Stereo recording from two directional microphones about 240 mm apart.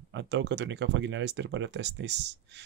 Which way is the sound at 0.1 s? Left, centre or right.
Right.